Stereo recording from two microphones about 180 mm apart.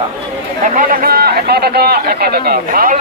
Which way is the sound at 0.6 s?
45° right (ahead or behind).